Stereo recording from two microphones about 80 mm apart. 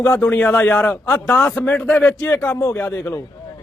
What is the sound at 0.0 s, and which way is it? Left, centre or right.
A man's voice, left.